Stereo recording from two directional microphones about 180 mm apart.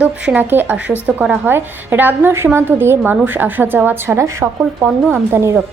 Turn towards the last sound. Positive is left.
turn(degrees=-15)  # may be behind; listen again after turning